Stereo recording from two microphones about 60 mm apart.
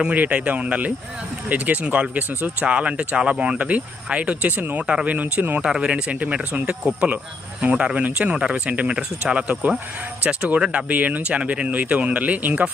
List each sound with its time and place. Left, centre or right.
0.0 s speech: right
4.5 s speech: right
4.8 s speech: centre
5.6 s speech: centre